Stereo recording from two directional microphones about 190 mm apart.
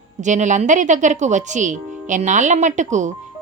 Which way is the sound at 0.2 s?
40° right (ahead or behind).